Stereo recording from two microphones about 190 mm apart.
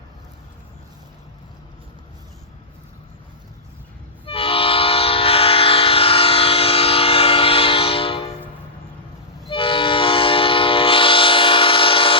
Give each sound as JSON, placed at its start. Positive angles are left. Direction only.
{"t": 4.3, "sound": "train", "side_deg": 30}
{"t": 9.5, "sound": "train", "side_deg": 25}